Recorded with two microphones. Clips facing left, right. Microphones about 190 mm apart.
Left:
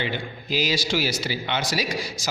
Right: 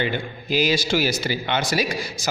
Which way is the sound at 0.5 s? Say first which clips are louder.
Right 4 dB; 55° right (ahead or behind).